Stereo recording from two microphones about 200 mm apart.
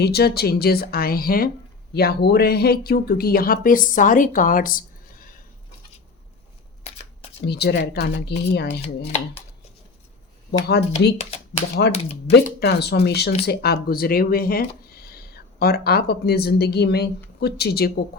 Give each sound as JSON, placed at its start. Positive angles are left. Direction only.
{"t": 0.0, "sound": "speech", "side_deg": 55}
{"t": 7.4, "sound": "speech", "side_deg": 55}
{"t": 10.7, "sound": "speech", "side_deg": 55}
{"t": 12.3, "sound": "speech", "side_deg": 55}